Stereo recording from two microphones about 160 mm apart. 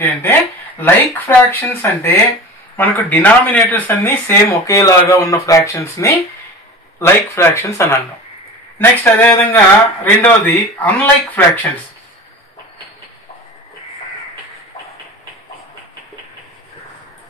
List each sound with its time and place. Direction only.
0.0 s speech: 15° left (ahead or behind)